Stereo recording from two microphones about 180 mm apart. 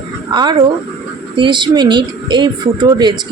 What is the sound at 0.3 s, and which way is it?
Speech, 25° right (ahead or behind).